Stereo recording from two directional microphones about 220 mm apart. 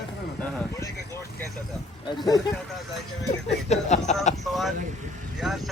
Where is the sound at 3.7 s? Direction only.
30° left (ahead or behind).